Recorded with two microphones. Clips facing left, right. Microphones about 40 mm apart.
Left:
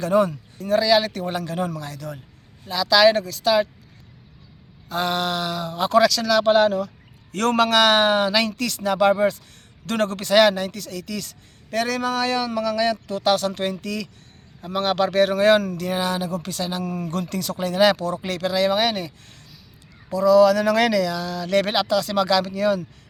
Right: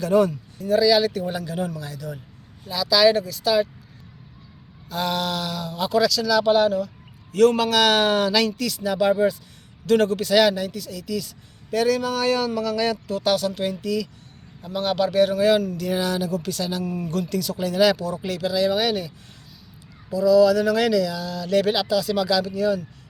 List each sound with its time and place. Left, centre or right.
0.1 s speech: left
0.6 s speech: left
2.6 s speech: left
4.9 s speech: left
5.9 s speech: left
7.8 s speech: left
8.5 s speech: left
12.1 s speech: left
15.8 s speech: left
16.8 s speech: left
17.1 s speech: left
20.1 s speech: left